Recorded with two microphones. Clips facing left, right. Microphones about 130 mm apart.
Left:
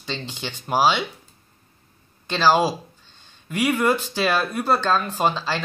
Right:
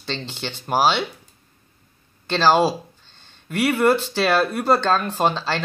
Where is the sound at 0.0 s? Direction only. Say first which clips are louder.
Right 2 dB; 10° left (ahead or behind).